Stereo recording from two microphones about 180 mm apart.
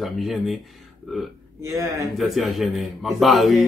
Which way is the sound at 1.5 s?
15° right (ahead or behind).